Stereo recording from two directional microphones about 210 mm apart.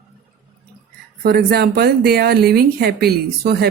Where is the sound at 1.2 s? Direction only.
45° right (ahead or behind).